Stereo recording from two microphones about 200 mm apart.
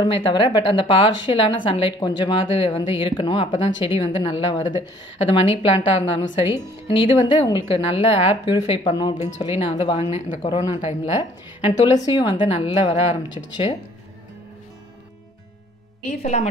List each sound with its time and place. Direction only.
0.0 s a woman's voice: 25° left (ahead or behind)
16.1 s speech: 35° left (ahead or behind)